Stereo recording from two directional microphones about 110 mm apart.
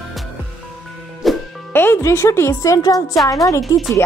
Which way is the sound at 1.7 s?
20° left (ahead or behind).